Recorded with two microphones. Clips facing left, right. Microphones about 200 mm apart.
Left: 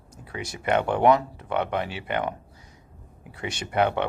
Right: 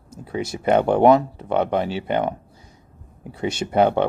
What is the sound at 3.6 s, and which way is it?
Speech, 35° right (ahead or behind).